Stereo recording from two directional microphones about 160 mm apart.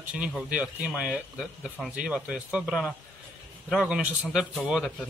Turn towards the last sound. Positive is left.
turn(degrees=0)  # may be behind; listen again after turning